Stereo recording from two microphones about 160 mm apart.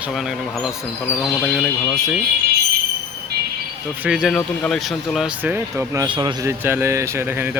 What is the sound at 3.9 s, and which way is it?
Speech, 10° right (ahead or behind).